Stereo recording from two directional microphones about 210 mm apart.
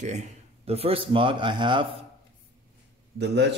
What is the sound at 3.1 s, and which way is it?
Speech, 55° right (ahead or behind).